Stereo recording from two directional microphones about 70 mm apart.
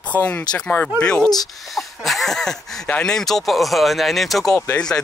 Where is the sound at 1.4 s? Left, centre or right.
Centre.